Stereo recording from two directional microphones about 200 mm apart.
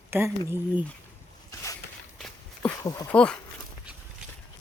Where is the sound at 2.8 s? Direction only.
15° left (ahead or behind).